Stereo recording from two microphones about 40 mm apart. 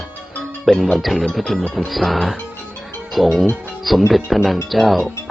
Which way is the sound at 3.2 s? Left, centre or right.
Centre.